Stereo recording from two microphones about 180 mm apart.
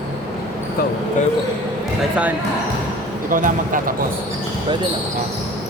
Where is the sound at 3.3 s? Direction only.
50° right (ahead or behind).